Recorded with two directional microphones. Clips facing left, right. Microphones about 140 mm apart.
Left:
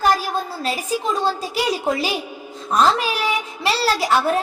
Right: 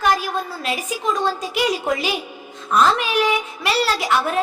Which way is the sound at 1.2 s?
35° left (ahead or behind).